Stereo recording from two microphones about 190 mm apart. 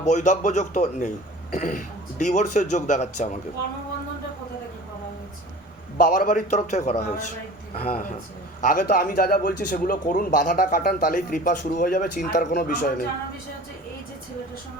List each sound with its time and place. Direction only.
0.0 s a man's voice: 40° left (ahead or behind)
6.0 s a man's voice: 45° left (ahead or behind)